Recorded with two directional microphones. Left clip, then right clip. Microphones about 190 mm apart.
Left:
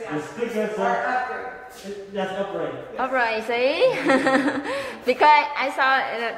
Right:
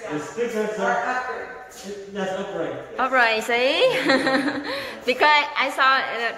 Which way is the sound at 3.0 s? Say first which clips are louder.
Right 4 dB; 5° right (ahead or behind).